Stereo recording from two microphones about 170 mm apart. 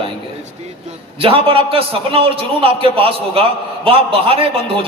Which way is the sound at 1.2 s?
35° right (ahead or behind).